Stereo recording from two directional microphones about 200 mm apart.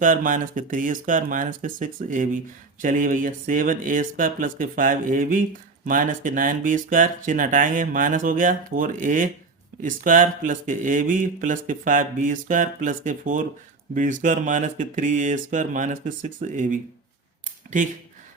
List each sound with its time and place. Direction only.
0.0 s speech: 40° right (ahead or behind)